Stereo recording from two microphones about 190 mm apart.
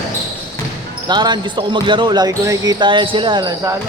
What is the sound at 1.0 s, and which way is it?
Speech, 20° right (ahead or behind).